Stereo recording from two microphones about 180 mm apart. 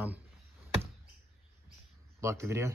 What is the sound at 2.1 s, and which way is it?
Speech, 15° right (ahead or behind).